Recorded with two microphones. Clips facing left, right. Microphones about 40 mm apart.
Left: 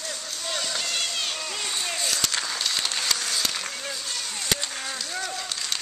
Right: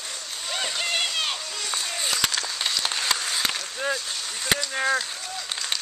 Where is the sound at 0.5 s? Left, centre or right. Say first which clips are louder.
Right 3 dB; right.